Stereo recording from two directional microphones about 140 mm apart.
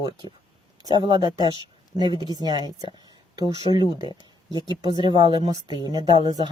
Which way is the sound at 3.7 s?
35° right (ahead or behind).